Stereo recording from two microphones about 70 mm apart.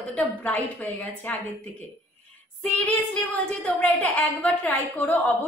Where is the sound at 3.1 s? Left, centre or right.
Left.